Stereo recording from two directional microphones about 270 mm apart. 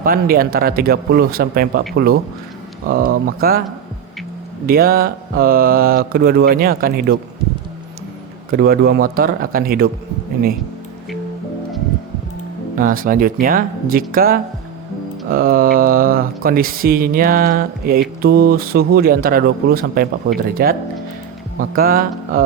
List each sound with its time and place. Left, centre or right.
0.0 s speech: right
4.6 s speech: right
8.4 s speech: right
12.7 s speech: right